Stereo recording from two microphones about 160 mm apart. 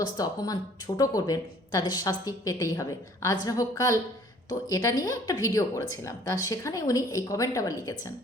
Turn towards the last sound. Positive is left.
turn(degrees=20)  # may be behind; listen again after turning